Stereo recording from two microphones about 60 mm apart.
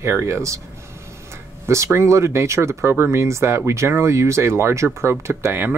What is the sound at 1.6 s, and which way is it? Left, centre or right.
Speech, right.